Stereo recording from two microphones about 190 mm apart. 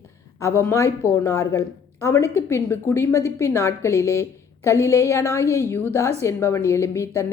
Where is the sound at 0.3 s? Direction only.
15° left (ahead or behind).